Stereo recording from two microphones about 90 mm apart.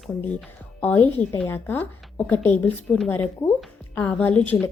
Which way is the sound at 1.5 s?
20° left (ahead or behind).